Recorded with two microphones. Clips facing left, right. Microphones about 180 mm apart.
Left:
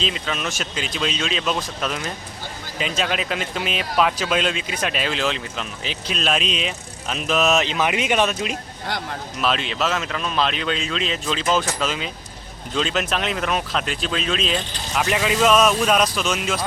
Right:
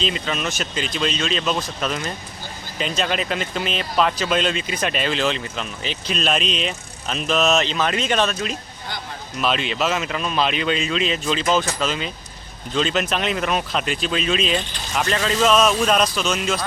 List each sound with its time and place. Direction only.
0.0 s speech: centre (ahead or behind)
8.9 s speech: 80° left
9.4 s speech: centre (ahead or behind)
15.0 s speech: 10° left (ahead or behind)